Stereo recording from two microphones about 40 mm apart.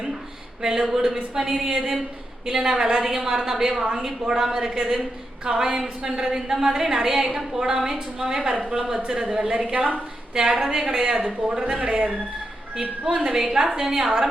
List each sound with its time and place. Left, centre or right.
0.6 s a woman's voice: centre
9.7 s a woman's voice: right
10.3 s a woman's voice: centre
13.1 s a woman's voice: centre